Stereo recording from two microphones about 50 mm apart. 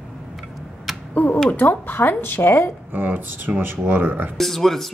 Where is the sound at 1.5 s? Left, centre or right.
Left.